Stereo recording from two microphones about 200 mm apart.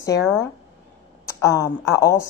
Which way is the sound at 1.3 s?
15° left (ahead or behind).